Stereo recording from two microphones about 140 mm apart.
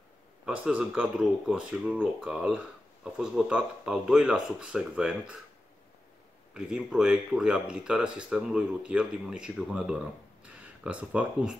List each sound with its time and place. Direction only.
0.7 s speech: 5° right (ahead or behind)
6.5 s speech: 5° right (ahead or behind)